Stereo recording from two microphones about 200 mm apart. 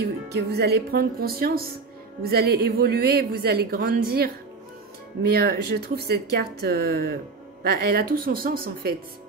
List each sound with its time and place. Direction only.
0.0 s a woman's voice: 55° right (ahead or behind)